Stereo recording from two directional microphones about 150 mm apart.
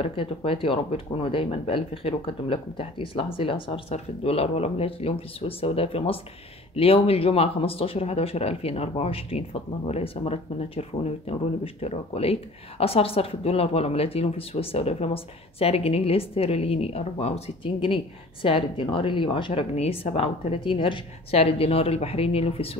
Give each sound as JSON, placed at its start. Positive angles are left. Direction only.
{"t": 0.0, "sound": "speech", "side_deg": 35}